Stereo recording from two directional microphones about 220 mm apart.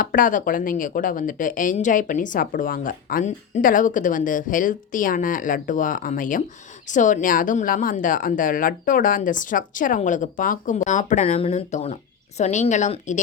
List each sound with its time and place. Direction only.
0.0 s speech: 40° left (ahead or behind)